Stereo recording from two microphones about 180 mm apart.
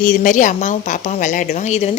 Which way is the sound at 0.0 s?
45° left (ahead or behind).